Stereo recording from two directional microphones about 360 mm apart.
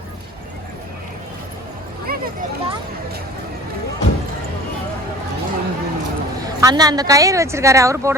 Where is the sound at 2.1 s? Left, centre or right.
Right.